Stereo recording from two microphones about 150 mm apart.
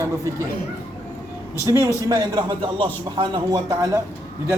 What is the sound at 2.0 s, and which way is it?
A man's voice, 25° right (ahead or behind).